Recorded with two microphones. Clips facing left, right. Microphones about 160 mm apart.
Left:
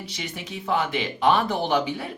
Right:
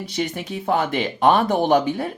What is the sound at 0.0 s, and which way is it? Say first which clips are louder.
Speech: right 9 dB; 50° right (ahead or behind).